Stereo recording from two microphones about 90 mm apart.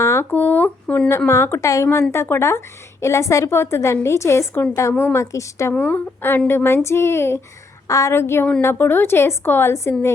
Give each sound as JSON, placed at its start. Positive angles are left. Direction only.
{"t": 0.0, "sound": "a sound", "side_deg": 30}
{"t": 0.3, "sound": "speech", "side_deg": 20}
{"t": 1.3, "sound": "a woman's voice", "side_deg": 35}
{"t": 5.7, "sound": "a woman's voice", "side_deg": 20}